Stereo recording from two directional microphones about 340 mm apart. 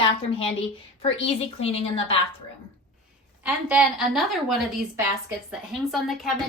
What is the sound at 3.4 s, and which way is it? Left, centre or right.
A woman's voice, centre.